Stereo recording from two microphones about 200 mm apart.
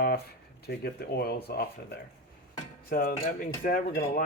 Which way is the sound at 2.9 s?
45° left (ahead or behind).